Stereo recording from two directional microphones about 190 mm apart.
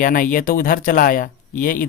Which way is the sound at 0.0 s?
45° left (ahead or behind).